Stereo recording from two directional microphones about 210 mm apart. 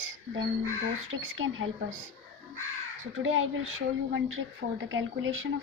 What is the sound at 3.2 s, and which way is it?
A woman's voice, 70° right (ahead or behind).